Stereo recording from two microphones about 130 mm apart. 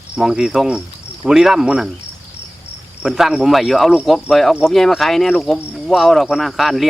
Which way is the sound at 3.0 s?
5° right (ahead or behind).